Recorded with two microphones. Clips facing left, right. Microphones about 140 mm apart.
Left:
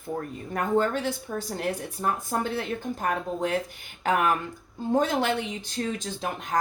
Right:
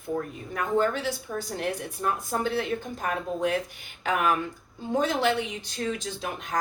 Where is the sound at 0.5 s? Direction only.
45° left (ahead or behind).